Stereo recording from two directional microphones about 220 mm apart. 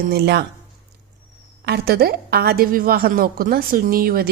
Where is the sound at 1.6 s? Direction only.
45° right (ahead or behind).